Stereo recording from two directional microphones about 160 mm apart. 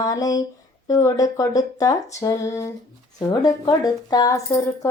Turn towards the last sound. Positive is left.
turn(degrees=20)  # may be behind; listen again after turning